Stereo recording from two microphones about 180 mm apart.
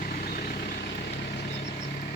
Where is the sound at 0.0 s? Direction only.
50° left (ahead or behind).